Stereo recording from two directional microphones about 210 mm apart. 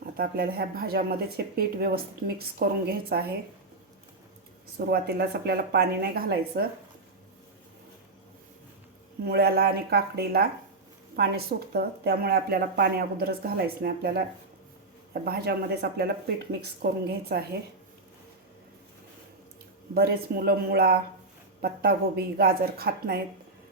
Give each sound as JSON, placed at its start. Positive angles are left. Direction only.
{"t": 0.0, "sound": "speech", "side_deg": -45}
{"t": 4.9, "sound": "speech", "side_deg": -50}
{"t": 9.2, "sound": "speech", "side_deg": -50}
{"t": 19.9, "sound": "speech", "side_deg": -45}